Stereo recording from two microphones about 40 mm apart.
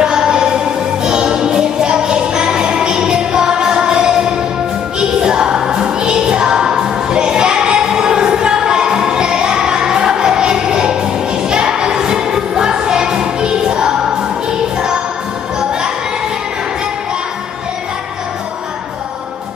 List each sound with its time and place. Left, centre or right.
0.0 s music: centre